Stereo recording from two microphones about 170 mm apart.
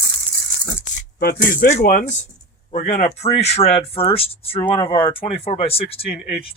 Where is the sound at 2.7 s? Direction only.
50° left (ahead or behind).